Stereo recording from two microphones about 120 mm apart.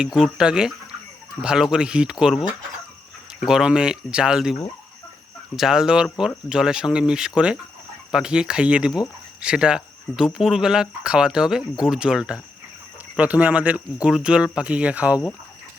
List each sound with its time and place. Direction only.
0.0 s speech: 5° right (ahead or behind)
3.4 s speech: 5° right (ahead or behind)
5.5 s speech: 5° right (ahead or behind)